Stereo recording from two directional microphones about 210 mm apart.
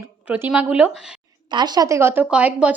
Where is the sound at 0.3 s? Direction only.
5° right (ahead or behind).